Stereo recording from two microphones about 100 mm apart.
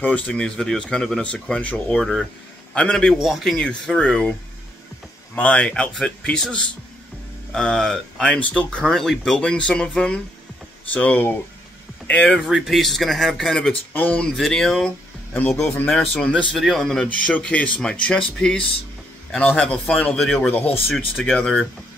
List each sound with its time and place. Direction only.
0.0 s speech: 15° left (ahead or behind)
5.3 s speech: 15° left (ahead or behind)
12.4 s speech: centre (ahead or behind)
14.3 s speech: centre (ahead or behind)
15.9 s speech: 10° left (ahead or behind)